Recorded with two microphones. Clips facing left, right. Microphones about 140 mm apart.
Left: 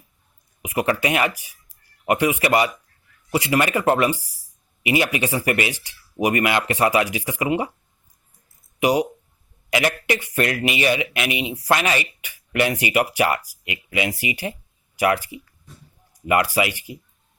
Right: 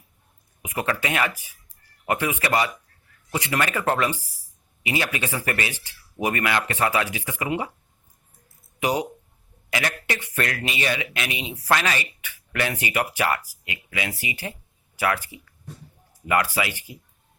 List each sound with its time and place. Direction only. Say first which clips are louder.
0.6 s speech: left 5 dB; 15° left (ahead or behind)
8.8 s speech: left 5 dB; 10° left (ahead or behind)